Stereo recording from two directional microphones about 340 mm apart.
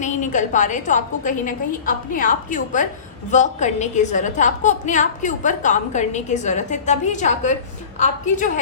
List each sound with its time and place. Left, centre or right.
0.0 s a woman's voice: left